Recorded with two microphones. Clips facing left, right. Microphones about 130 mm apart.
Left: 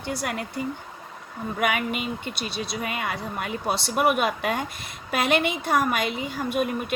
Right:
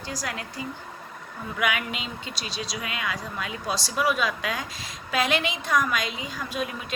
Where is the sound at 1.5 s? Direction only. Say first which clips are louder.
Left 3 dB; 50° left (ahead or behind).